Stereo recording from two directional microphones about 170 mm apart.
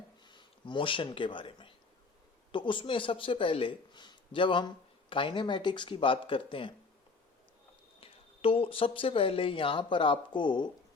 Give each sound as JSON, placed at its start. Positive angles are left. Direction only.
{"t": 0.3, "sound": "speech", "side_deg": 30}
{"t": 8.0, "sound": "speech", "side_deg": 35}